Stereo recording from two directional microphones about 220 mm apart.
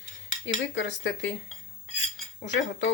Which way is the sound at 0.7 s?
55° left (ahead or behind).